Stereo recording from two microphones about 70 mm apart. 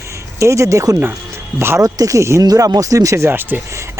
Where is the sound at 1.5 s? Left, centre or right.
Right.